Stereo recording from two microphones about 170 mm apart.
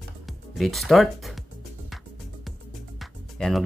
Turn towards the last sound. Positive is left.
turn(degrees=0)  # may be behind; listen again after turning